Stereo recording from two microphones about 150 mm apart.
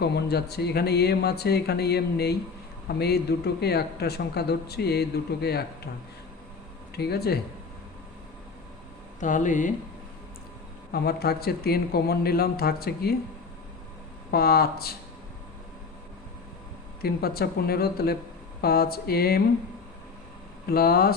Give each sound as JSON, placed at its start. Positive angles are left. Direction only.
{"t": 0.0, "sound": "speech", "side_deg": 90}
{"t": 6.9, "sound": "speech", "side_deg": 90}
{"t": 9.2, "sound": "speech", "side_deg": 60}
{"t": 10.9, "sound": "speech", "side_deg": 90}
{"t": 14.3, "sound": "speech", "side_deg": 90}
{"t": 17.0, "sound": "speech", "side_deg": 90}
{"t": 20.7, "sound": "speech", "side_deg": 90}